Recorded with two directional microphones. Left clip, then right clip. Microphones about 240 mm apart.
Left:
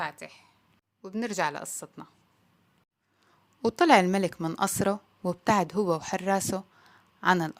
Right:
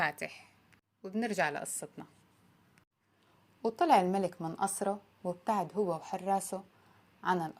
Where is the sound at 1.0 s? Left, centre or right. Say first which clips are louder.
Left 3 dB; centre.